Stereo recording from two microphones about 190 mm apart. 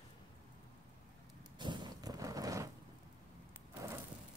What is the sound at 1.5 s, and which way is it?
Horse, 25° right (ahead or behind).